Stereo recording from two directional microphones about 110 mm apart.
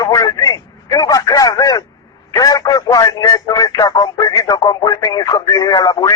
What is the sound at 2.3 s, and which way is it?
Speech, 35° left (ahead or behind).